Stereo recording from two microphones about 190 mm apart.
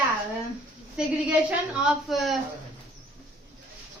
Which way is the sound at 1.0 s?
5° right (ahead or behind).